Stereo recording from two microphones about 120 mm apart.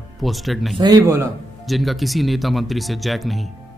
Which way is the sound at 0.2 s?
Centre (ahead or behind).